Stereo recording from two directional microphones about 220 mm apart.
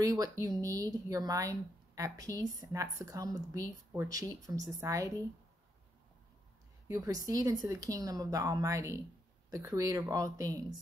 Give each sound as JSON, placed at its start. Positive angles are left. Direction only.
{"t": 0.0, "sound": "speech", "side_deg": -15}
{"t": 6.9, "sound": "a woman's voice", "side_deg": -15}